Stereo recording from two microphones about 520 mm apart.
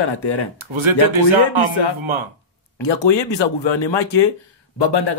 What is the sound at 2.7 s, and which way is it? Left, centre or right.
Speech, left.